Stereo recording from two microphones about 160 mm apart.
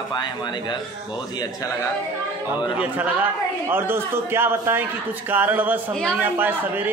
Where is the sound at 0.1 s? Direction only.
25° left (ahead or behind).